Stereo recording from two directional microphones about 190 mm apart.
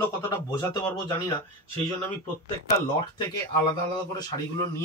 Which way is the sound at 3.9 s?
20° left (ahead or behind).